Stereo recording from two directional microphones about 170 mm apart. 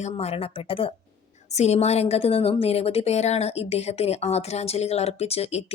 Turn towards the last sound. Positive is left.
turn(degrees=35)  # may be behind; listen again after turning